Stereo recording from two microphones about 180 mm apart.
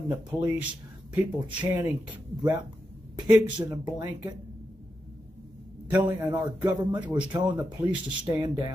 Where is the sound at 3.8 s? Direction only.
15° right (ahead or behind).